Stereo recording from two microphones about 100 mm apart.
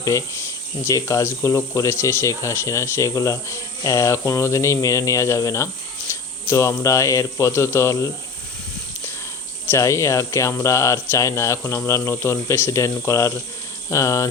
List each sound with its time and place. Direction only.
0.9 s speech: 30° left (ahead or behind)
9.6 s speech: 30° left (ahead or behind)